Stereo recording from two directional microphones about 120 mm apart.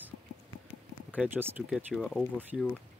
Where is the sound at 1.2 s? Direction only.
15° right (ahead or behind).